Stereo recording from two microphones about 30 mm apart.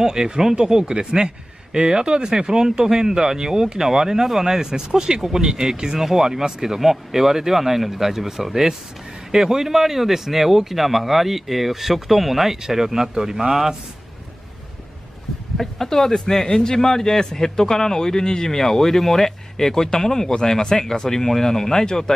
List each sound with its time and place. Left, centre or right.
0.0 s speech: right
5.9 s speech: centre
15.5 s a man's voice: centre